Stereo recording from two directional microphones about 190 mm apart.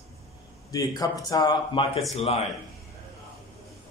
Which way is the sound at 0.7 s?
20° left (ahead or behind).